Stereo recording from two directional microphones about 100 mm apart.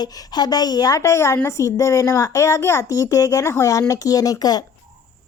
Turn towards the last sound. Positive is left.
turn(degrees=40)  # may be behind; listen again after turning